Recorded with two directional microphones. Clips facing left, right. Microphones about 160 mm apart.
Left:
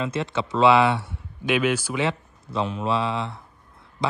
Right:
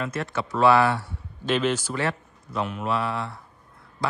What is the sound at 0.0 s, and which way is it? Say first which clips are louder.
A man's voice: left 3 dB; 25° left (ahead or behind).